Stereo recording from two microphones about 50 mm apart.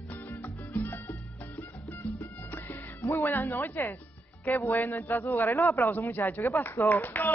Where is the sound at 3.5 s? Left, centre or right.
Left.